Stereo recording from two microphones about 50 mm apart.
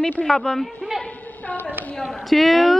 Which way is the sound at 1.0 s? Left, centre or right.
Left.